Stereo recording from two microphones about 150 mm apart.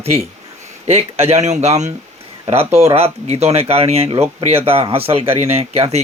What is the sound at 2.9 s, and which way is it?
Speech, 40° right (ahead or behind).